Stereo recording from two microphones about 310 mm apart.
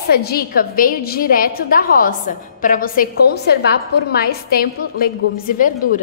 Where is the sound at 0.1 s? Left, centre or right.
Left.